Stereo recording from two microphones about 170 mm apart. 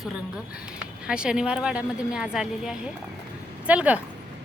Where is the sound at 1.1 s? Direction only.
5° right (ahead or behind).